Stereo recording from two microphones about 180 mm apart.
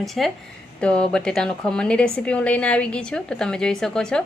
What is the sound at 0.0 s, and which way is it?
Speech, centre (ahead or behind).